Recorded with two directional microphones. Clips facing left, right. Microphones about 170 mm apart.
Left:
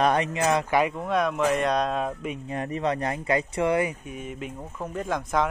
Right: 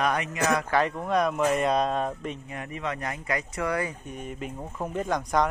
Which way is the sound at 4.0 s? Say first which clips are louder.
Left 1 dB; 5° left (ahead or behind).